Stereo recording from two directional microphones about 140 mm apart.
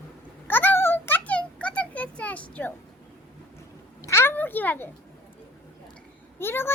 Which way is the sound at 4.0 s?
20° left (ahead or behind).